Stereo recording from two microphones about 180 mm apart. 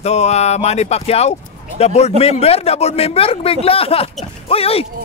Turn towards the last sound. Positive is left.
turn(degrees=30)  # may be behind; listen again after turning